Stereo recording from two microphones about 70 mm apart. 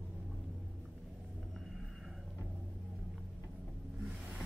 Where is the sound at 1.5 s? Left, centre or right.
Centre.